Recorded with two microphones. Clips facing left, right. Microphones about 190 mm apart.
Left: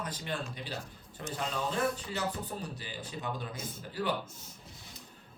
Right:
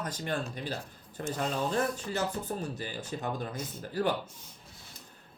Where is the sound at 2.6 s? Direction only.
45° right (ahead or behind).